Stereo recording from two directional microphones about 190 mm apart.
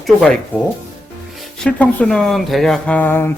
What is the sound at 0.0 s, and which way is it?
Speech, centre (ahead or behind).